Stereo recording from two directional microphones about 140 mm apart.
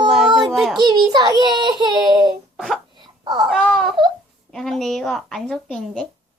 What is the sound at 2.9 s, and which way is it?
Wail, 35° right (ahead or behind).